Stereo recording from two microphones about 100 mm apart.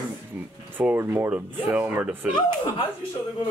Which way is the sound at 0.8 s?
20° right (ahead or behind).